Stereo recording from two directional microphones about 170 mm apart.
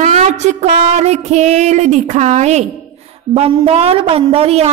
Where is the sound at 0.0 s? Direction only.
45° right (ahead or behind).